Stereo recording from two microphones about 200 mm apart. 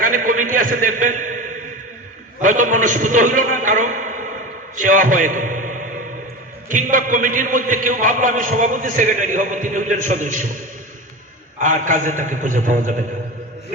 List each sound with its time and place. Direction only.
0.0 s a man's voice: 45° right (ahead or behind)
11.6 s a man's voice: 40° right (ahead or behind)